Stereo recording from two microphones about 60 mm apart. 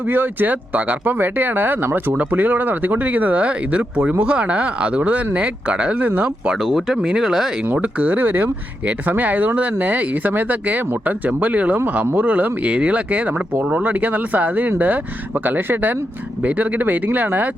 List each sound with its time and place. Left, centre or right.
0.1 s speech: right
6.7 s speech: centre
7.7 s speech: right